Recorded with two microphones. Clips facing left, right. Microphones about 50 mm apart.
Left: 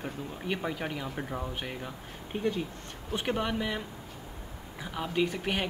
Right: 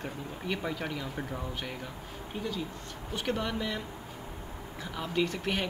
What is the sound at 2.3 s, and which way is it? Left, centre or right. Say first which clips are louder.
Speech: left 6 dB; left.